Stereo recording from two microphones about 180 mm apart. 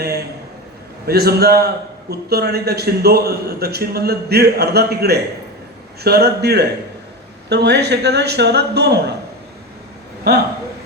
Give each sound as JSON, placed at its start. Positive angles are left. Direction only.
{"t": 0.0, "sound": "a sound", "side_deg": -65}
{"t": 1.0, "sound": "a man's voice", "side_deg": -60}
{"t": 10.3, "sound": "a man's voice", "side_deg": -65}